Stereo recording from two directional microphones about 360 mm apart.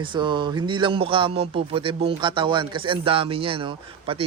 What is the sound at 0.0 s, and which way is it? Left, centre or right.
Speech, centre.